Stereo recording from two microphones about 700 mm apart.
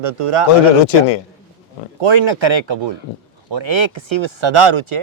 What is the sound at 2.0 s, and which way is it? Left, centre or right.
Speech, right.